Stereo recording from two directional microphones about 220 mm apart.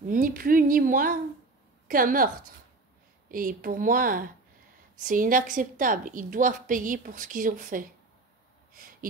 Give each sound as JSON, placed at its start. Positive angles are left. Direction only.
{"t": 0.1, "sound": "a woman's voice", "side_deg": -40}